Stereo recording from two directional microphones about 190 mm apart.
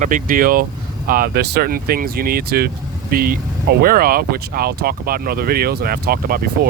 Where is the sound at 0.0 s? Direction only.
45° right (ahead or behind).